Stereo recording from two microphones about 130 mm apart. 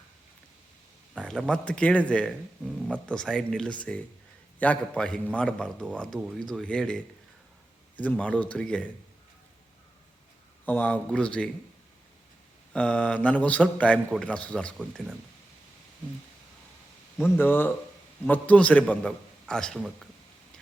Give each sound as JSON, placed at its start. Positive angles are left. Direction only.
{"t": 1.1, "sound": "a man's voice", "side_deg": 5}
{"t": 10.7, "sound": "a man's voice", "side_deg": 10}
{"t": 12.7, "sound": "a man's voice", "side_deg": 10}
{"t": 17.2, "sound": "a man's voice", "side_deg": 15}